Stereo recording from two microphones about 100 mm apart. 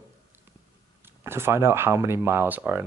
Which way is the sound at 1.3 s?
25° right (ahead or behind).